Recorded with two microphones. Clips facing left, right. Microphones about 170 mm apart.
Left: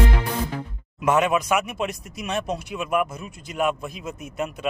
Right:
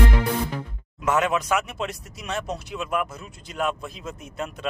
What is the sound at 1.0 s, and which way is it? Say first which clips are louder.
A man's voice: left 2 dB; 15° left (ahead or behind).